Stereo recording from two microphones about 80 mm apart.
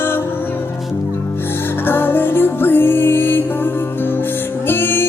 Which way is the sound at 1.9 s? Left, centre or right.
Left.